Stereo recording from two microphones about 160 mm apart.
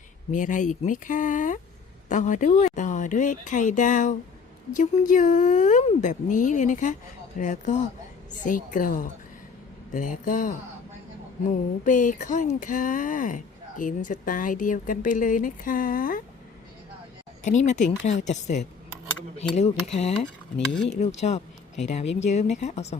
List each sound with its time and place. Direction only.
0.3 s speech: 50° left (ahead or behind)
11.9 s speech: 50° left (ahead or behind)
17.4 s speech: 50° left (ahead or behind)